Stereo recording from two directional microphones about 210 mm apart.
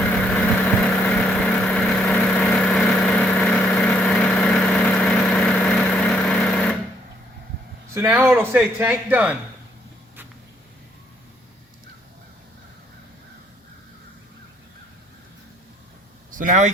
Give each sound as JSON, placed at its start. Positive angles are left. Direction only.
{"t": 0.0, "sound": "vehicle", "side_deg": 5}
{"t": 7.9, "sound": "a man's voice", "side_deg": -10}
{"t": 16.3, "sound": "speech", "side_deg": -40}